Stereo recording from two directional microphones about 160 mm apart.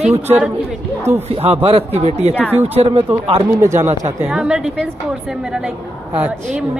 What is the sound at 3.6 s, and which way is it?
Speech, 15° right (ahead or behind).